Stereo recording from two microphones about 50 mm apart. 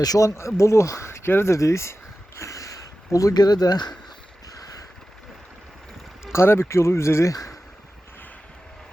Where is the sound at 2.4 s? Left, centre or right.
Left.